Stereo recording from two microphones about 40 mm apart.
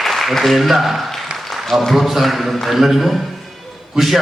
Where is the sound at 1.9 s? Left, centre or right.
Centre.